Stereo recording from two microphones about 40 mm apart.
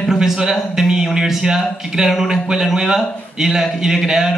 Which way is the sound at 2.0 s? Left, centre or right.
Centre.